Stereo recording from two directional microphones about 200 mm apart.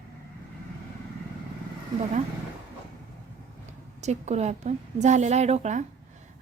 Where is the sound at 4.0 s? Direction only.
35° right (ahead or behind).